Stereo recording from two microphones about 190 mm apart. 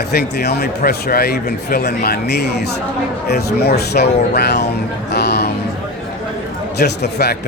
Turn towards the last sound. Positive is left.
turn(degrees=60)  # may be behind; listen again after turning